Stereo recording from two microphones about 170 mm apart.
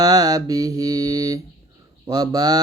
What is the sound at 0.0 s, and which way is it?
Mantra, 20° right (ahead or behind).